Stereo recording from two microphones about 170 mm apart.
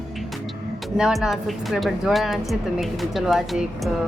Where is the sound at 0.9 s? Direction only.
5° right (ahead or behind).